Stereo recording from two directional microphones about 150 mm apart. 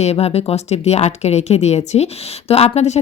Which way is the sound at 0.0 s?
45° left (ahead or behind).